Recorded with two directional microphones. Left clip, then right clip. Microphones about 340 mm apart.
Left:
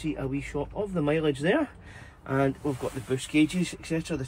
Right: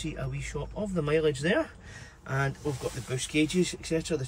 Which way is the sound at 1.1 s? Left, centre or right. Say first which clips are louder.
Even; centre.